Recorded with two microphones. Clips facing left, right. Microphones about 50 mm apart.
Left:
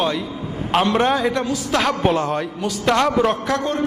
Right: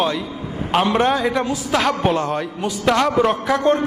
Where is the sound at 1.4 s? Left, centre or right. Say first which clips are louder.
Right 1 dB; centre.